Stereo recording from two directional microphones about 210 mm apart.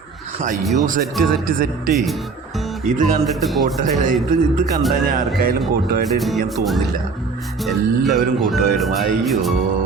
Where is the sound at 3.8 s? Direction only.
40° right (ahead or behind).